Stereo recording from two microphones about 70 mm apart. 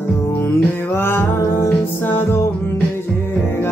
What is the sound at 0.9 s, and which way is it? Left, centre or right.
Music, left.